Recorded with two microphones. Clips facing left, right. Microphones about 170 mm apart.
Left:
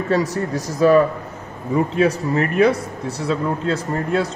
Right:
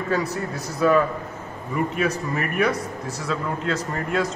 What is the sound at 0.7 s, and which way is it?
A man's voice, 35° left (ahead or behind).